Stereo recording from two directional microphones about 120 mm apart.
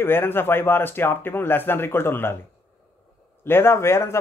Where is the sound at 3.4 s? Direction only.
20° left (ahead or behind).